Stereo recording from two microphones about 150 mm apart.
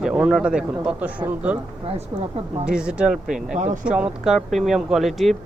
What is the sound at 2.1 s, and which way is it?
Speech, 25° right (ahead or behind).